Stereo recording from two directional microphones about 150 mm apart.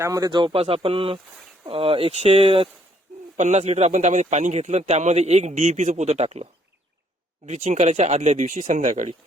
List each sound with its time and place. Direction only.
0.0 s speech: 25° right (ahead or behind); by 2.6 s 40° right (ahead or behind)
3.3 s a man's voice: 50° right (ahead or behind)